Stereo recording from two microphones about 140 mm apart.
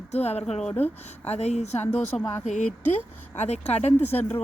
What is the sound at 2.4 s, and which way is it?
A woman's voice, 55° left (ahead or behind).